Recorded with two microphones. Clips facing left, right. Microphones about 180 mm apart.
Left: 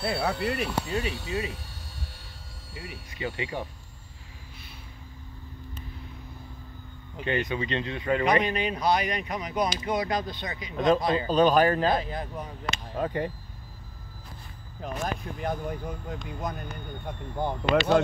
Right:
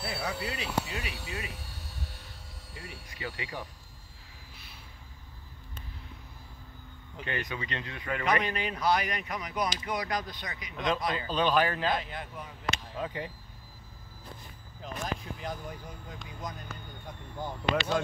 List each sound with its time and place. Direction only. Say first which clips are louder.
0.0 s speech: left 7 dB; 60° left (ahead or behind)
0.8 s speech: left 9 dB; 35° left (ahead or behind)
2.7 s speech: left 5 dB; 20° left (ahead or behind)
7.2 s speech: left 8 dB; 25° left (ahead or behind)
11.2 s speech: left 6 dB; 40° left (ahead or behind)
14.8 s speech: left 4 dB; 55° left (ahead or behind)